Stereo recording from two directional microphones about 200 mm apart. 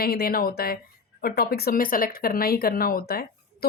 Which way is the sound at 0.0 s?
50° left (ahead or behind).